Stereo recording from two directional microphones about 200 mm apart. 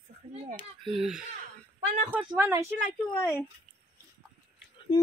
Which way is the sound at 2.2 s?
15° right (ahead or behind).